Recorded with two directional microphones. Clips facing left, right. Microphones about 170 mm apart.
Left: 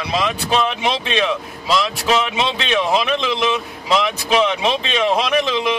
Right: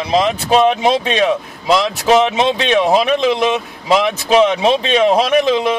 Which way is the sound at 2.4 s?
40° right (ahead or behind).